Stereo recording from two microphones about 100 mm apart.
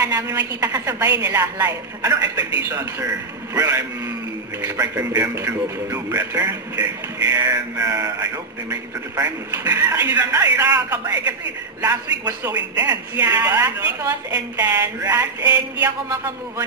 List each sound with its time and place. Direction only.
0.0 s a woman's voice: 30° right (ahead or behind)
3.5 s a sound: 30° right (ahead or behind)
9.2 s a woman's voice: 25° right (ahead or behind)
12.7 s a woman's voice: 35° right (ahead or behind)